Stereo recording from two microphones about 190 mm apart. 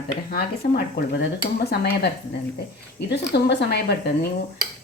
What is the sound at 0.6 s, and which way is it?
A woman's voice, 50° left (ahead or behind).